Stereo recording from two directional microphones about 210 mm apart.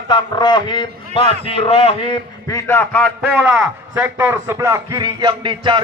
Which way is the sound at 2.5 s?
10° left (ahead or behind).